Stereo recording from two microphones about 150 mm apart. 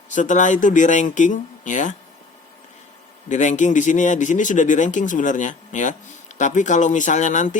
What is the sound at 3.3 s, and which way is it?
Speech, 55° left (ahead or behind).